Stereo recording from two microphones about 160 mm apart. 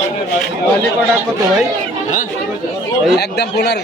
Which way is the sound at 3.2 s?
90° left.